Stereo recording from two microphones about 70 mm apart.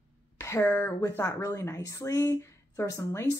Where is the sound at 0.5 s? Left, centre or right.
Left.